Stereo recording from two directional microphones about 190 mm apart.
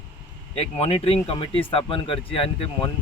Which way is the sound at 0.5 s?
30° left (ahead or behind).